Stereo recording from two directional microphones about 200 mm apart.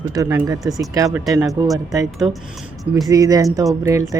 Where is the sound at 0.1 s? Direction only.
15° right (ahead or behind).